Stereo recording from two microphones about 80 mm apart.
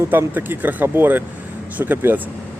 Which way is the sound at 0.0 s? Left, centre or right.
Right.